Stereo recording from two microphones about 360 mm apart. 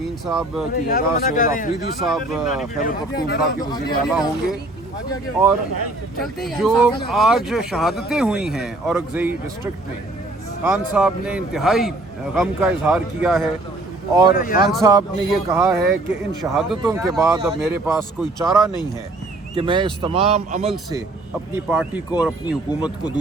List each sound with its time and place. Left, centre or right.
0.3 s a man's voice: centre
0.7 s speech: left
2.0 s a man's voice: centre
2.7 s speech: left
3.6 s speech: centre
4.0 s a man's voice: centre
6.1 s a man's voice: centre
10.6 s a man's voice: centre
14.3 s speech: left
14.8 s a man's voice: centre
19.5 s a man's voice: centre
21.5 s a man's voice: centre